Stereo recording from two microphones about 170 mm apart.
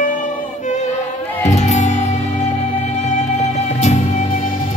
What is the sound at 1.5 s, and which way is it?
Music, 45° left (ahead or behind).